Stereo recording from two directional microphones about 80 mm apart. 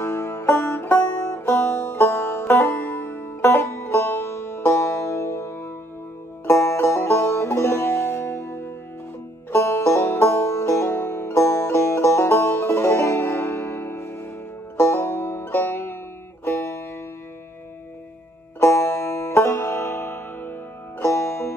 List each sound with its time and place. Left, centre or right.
0.0 s music: left
18.6 s music: left